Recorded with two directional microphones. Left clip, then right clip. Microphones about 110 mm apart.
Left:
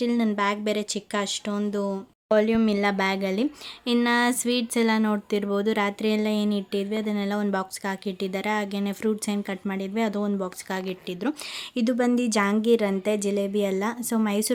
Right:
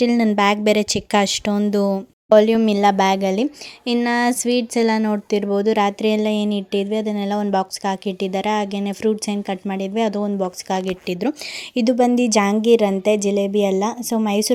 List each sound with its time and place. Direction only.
0.0 s speech: 70° right (ahead or behind)
2.3 s speech: 45° right (ahead or behind); by 14.5 s 30° right (ahead or behind)